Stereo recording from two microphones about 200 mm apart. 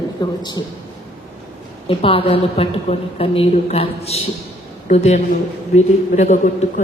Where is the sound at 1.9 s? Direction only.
25° left (ahead or behind).